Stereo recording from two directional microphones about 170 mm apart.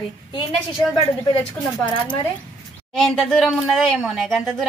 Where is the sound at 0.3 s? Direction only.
30° left (ahead or behind).